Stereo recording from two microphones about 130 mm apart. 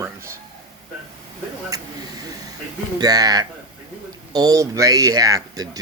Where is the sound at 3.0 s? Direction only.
30° right (ahead or behind).